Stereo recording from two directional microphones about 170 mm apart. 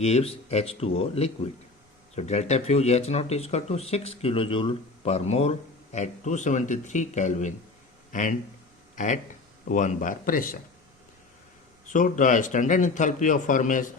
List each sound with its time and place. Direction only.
0.0 s a man's voice: 40° left (ahead or behind); by 10.6 s 55° left (ahead or behind)
11.9 s a man's voice: 50° left (ahead or behind)